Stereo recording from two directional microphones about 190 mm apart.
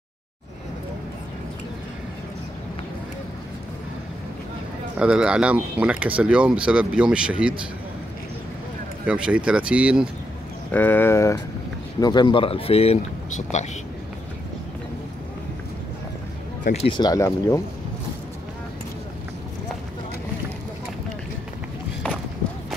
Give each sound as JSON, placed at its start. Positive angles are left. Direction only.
{"t": 4.9, "sound": "speech", "side_deg": -5}
{"t": 9.0, "sound": "speech", "side_deg": -5}
{"t": 10.7, "sound": "speech", "side_deg": 10}
{"t": 16.6, "sound": "speech", "side_deg": 30}